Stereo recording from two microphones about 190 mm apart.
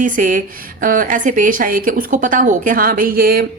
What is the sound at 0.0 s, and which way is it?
Speech, 45° right (ahead or behind).